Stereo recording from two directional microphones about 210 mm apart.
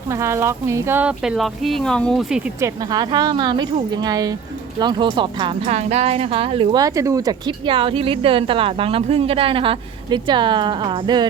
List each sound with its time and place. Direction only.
0.1 s speech: 15° right (ahead or behind); by 2.4 s centre (ahead or behind)
2.6 s speech: 15° right (ahead or behind)